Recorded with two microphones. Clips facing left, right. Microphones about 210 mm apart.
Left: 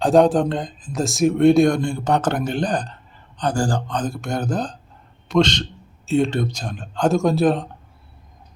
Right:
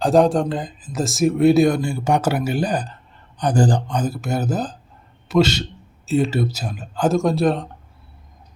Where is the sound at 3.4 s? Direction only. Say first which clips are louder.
Right 3 dB; 20° right (ahead or behind); by 7.7 s centre (ahead or behind).